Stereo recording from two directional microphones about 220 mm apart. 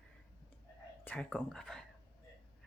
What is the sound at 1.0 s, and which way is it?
Speech, 5° left (ahead or behind).